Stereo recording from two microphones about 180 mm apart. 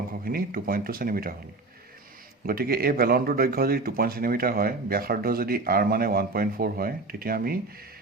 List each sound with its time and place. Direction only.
0.3 s speech: 55° right (ahead or behind)
2.5 s speech: 55° right (ahead or behind)